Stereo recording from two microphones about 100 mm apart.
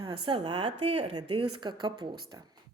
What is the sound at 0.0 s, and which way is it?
Speech, 60° right (ahead or behind).